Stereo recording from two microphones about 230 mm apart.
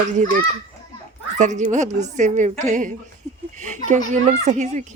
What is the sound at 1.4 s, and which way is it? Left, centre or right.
A woman's voice, right.